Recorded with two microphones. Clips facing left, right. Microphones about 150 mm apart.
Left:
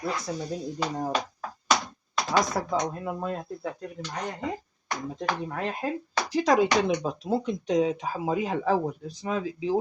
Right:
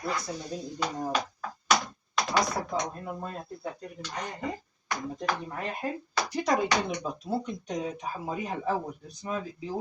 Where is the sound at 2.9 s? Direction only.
90° left.